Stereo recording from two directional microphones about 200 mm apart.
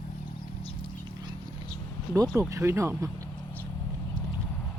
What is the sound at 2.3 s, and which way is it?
Speech, 15° right (ahead or behind).